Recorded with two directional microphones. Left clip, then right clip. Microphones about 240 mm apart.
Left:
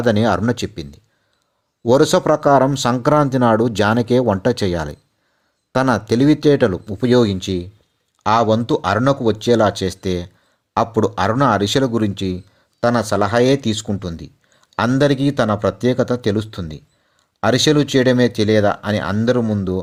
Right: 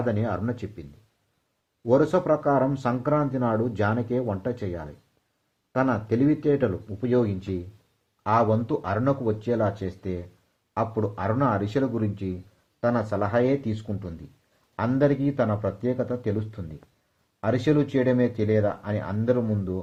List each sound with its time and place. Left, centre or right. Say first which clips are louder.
0.0 s speech: left 11 dB; left